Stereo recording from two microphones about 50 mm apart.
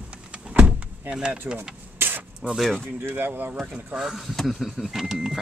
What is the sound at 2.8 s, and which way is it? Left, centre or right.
Speech, right.